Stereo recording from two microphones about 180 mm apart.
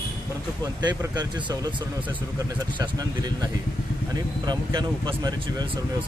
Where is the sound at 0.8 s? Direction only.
20° right (ahead or behind).